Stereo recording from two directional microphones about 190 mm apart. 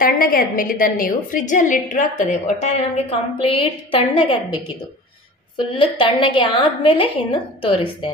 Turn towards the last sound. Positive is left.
turn(degrees=30)  # may be behind; listen again after turning